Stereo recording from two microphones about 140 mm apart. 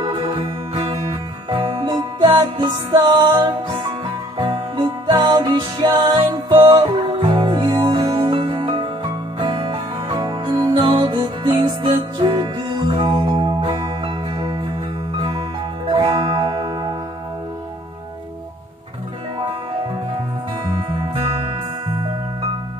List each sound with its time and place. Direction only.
0.2 s music: 45° right (ahead or behind)
1.5 s music: 30° right (ahead or behind)
15.9 s music: 40° right (ahead or behind)